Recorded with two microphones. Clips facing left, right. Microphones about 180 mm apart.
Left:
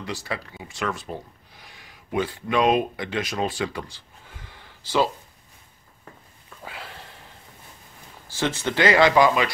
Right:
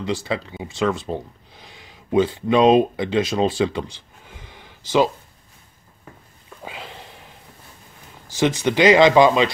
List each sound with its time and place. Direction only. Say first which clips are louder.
0.0 s speech: right 7 dB; 25° right (ahead or behind)
6.6 s sniff: right 3 dB; 20° right (ahead or behind)
8.3 s speech: right 6 dB; 15° right (ahead or behind)